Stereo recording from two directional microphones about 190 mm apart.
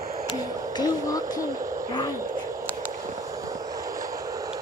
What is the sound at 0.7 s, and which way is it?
Speech, 20° left (ahead or behind).